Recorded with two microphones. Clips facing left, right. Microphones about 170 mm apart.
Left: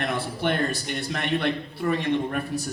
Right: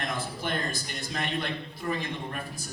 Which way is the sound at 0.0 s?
60° left (ahead or behind).